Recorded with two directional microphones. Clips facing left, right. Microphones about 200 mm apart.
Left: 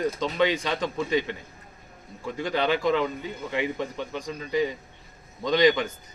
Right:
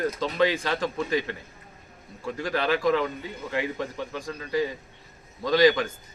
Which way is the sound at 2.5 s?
5° right (ahead or behind).